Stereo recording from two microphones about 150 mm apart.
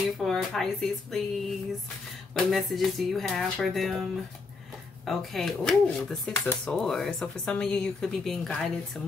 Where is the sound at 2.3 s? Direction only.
Centre (ahead or behind).